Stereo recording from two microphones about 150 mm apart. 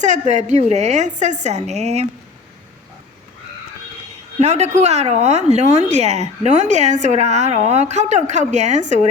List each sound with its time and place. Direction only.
0.0 s speech: 50° right (ahead or behind)
4.4 s speech: 45° right (ahead or behind)